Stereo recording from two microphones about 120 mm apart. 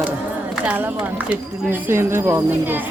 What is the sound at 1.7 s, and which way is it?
Speech, 20° right (ahead or behind).